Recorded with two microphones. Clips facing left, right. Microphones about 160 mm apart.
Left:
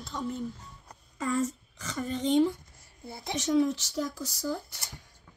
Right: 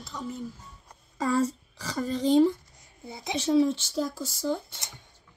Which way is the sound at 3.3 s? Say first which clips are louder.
Right 3 dB; 30° right (ahead or behind).